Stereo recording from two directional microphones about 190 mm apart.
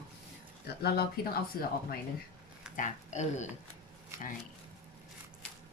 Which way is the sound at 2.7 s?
40° left (ahead or behind).